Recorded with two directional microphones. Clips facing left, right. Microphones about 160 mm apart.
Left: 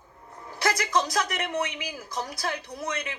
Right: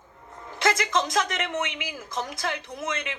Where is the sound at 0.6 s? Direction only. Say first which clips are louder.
Right 2 dB; 25° right (ahead or behind).